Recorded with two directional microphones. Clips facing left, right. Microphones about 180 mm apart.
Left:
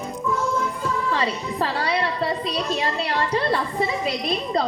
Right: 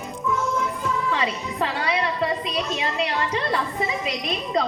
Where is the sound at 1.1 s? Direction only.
35° left (ahead or behind).